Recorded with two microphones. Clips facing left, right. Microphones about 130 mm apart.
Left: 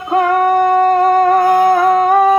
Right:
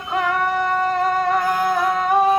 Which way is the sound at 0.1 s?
45° left (ahead or behind).